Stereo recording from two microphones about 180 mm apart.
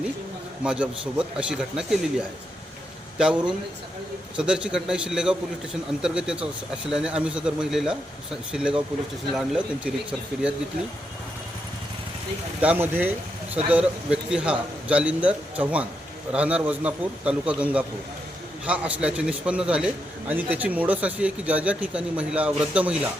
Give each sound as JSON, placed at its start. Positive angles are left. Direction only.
{"t": 0.6, "sound": "speech", "side_deg": -5}
{"t": 12.6, "sound": "a man's voice", "side_deg": -10}